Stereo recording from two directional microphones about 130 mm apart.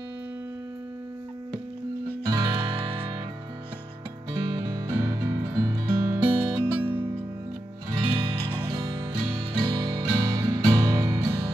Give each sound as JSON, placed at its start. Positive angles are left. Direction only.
{"t": 2.2, "sound": "music", "side_deg": -35}
{"t": 4.6, "sound": "music", "side_deg": -25}
{"t": 5.9, "sound": "guitar", "side_deg": -40}
{"t": 6.7, "sound": "music", "side_deg": -15}
{"t": 7.9, "sound": "music", "side_deg": -40}
{"t": 9.7, "sound": "music", "side_deg": -30}